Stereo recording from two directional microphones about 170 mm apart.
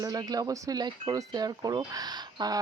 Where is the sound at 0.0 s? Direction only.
20° right (ahead or behind).